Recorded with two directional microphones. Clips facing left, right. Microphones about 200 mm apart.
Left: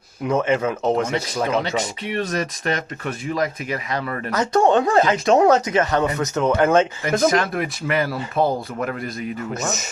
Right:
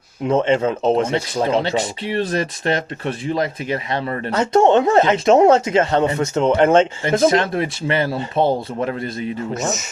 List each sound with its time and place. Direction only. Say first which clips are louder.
0.3 s speech: right 3 dB; 30° right (ahead or behind)